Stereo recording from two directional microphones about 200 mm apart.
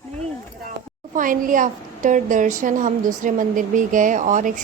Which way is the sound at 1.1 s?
40° right (ahead or behind).